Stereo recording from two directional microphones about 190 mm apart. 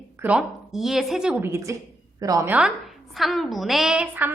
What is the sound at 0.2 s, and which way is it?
A woman's voice, 5° right (ahead or behind).